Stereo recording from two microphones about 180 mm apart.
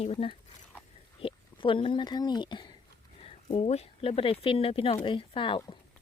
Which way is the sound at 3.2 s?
35° left (ahead or behind).